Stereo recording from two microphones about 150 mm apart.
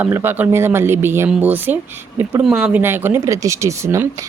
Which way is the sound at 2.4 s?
5° right (ahead or behind).